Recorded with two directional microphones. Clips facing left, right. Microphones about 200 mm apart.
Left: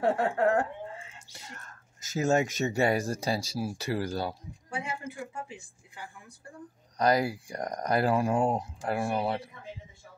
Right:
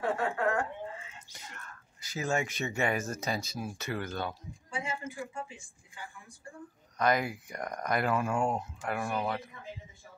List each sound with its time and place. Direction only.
0.0 s speech: 35° left (ahead or behind)
4.6 s a sound: 65° left (ahead or behind)
7.0 s speech: 35° left (ahead or behind)